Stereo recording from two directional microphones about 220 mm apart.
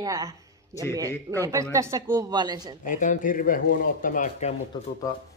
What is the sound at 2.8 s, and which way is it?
Speech, 35° left (ahead or behind).